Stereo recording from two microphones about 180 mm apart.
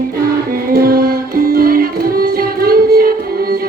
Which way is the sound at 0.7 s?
55° right (ahead or behind).